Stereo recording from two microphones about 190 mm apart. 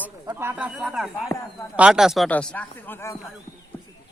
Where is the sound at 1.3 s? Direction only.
15° left (ahead or behind).